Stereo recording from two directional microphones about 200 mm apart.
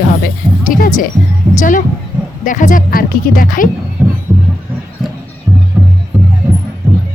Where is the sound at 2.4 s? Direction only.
40° left (ahead or behind).